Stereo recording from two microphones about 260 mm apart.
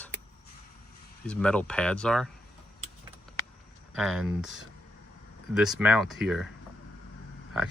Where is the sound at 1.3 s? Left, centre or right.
Centre.